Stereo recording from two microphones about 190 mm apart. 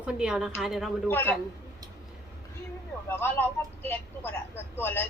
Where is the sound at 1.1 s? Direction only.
10° left (ahead or behind).